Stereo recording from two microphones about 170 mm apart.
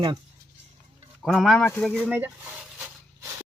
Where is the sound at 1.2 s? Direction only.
Centre (ahead or behind).